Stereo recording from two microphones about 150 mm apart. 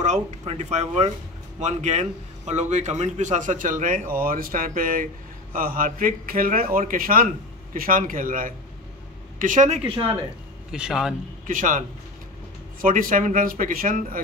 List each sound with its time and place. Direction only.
0.0 s a man's voice: 50° right (ahead or behind)
10.7 s a man's voice: 5° right (ahead or behind)
11.4 s a man's voice: 60° right (ahead or behind)
12.8 s a man's voice: 65° right (ahead or behind)